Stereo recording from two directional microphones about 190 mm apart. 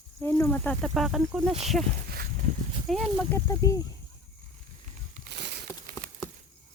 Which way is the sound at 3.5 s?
20° left (ahead or behind).